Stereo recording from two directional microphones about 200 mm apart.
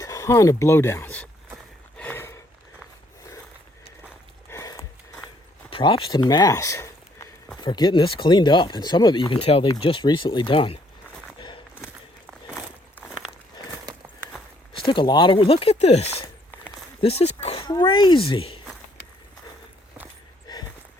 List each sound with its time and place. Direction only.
0.0 s speech: 15° left (ahead or behind)
2.0 s a sound: 10° left (ahead or behind)
4.4 s a sound: 15° left (ahead or behind)
5.7 s speech: 25° left (ahead or behind)
11.3 s walk: 25° left (ahead or behind)
14.7 s speech: 25° left (ahead or behind)